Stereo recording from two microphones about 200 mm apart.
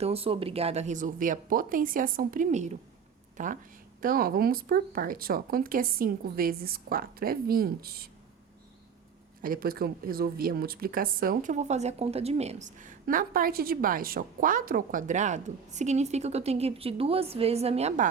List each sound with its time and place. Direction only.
0.0 s speech: 30° right (ahead or behind); by 8.1 s 50° right (ahead or behind)
9.4 s speech: 45° right (ahead or behind)